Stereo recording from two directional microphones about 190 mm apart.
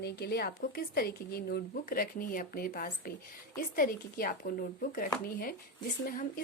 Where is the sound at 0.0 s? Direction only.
55° left (ahead or behind).